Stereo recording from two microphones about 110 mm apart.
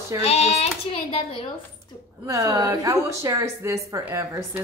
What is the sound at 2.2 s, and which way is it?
A woman's voice, 30° right (ahead or behind).